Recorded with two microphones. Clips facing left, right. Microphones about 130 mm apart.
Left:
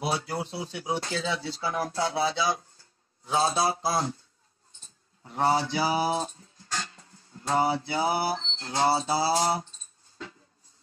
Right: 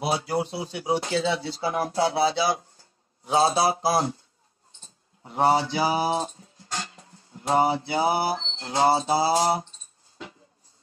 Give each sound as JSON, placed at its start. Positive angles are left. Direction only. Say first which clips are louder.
{"t": 0.0, "sound": "speech", "louder": "right 4 dB", "side_deg": -15}
{"t": 1.3, "sound": "music", "louder": "right 4 dB", "side_deg": -25}
{"t": 3.8, "sound": "music", "louder": "right 4 dB", "side_deg": -25}
{"t": 4.8, "sound": "speech", "louder": "right 4 dB", "side_deg": -20}
{"t": 8.4, "sound": "music", "louder": "right 4 dB", "side_deg": -25}